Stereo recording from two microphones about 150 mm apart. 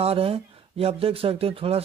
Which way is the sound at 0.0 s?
40° right (ahead or behind).